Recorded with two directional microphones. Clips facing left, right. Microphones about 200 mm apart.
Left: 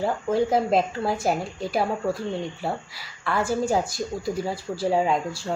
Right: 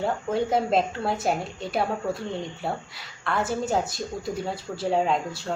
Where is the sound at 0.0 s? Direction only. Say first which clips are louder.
Left 3 dB; centre (ahead or behind).